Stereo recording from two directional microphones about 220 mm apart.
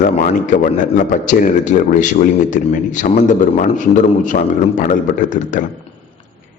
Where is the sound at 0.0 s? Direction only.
35° left (ahead or behind).